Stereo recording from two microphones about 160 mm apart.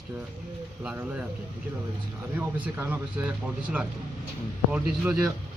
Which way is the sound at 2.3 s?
10° right (ahead or behind).